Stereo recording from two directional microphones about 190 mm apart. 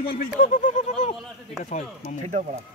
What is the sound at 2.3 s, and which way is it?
Speech, 40° right (ahead or behind).